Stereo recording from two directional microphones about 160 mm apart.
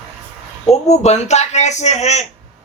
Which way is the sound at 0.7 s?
45° left (ahead or behind).